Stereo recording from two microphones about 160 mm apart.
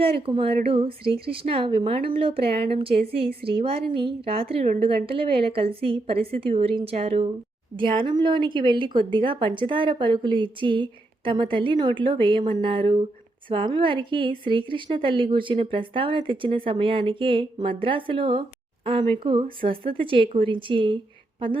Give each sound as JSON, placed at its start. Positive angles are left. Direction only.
{"t": 0.0, "sound": "a woman's voice", "side_deg": -35}